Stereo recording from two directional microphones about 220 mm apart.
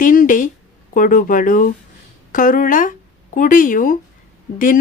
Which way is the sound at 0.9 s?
40° left (ahead or behind).